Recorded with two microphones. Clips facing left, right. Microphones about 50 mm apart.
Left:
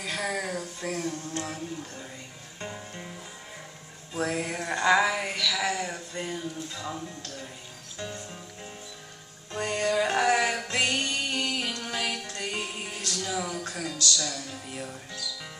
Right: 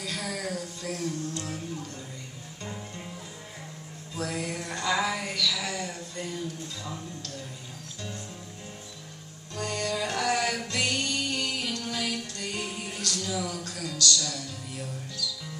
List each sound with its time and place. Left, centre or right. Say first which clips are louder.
0.0 s a sound: left 3 dB; left
4.1 s music: left 3 dB; left
9.5 s music: left 4 dB; left